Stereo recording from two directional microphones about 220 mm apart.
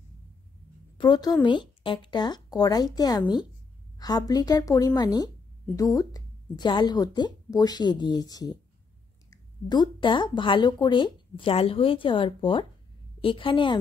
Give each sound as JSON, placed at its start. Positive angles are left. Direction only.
{"t": 0.9, "sound": "a woman's voice", "side_deg": 20}